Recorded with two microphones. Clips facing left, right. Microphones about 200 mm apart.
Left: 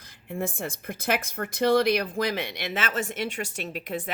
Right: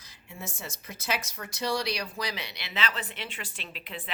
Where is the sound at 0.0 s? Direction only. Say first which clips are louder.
Left 11 dB; 55° left (ahead or behind).